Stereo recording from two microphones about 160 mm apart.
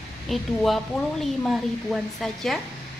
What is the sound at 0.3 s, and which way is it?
Speech, centre (ahead or behind).